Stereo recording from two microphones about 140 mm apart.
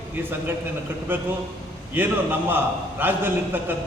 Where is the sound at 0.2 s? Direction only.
15° right (ahead or behind).